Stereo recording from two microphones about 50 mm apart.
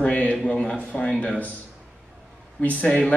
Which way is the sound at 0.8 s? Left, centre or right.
Centre.